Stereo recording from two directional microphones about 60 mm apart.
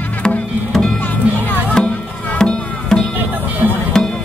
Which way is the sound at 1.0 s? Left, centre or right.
Left.